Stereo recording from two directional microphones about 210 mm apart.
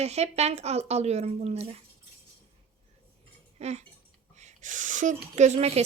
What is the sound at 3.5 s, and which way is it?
Speech, 30° right (ahead or behind).